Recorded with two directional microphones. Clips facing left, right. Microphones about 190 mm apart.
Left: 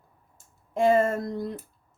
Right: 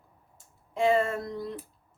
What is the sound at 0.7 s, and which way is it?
Speech, 45° left (ahead or behind).